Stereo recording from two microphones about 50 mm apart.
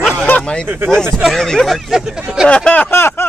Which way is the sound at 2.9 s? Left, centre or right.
Left.